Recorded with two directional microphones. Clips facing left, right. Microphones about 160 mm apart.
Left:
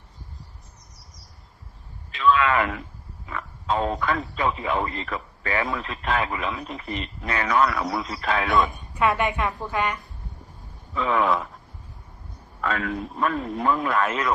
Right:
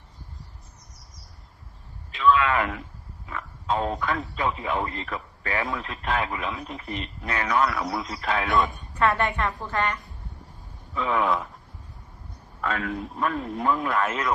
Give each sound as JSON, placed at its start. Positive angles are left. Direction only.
{"t": 2.4, "sound": "a man's voice", "side_deg": 90}
{"t": 8.7, "sound": "a woman's voice", "side_deg": 10}
{"t": 10.9, "sound": "speech", "side_deg": 90}
{"t": 12.6, "sound": "speech", "side_deg": 90}